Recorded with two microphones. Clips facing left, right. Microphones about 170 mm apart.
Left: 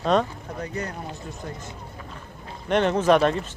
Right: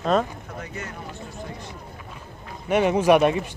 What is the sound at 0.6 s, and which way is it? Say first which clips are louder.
Speech: left 7 dB; 35° left (ahead or behind).